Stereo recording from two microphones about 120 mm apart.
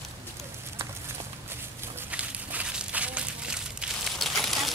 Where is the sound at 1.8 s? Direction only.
15° right (ahead or behind).